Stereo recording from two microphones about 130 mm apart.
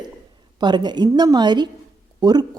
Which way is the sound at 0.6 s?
35° right (ahead or behind).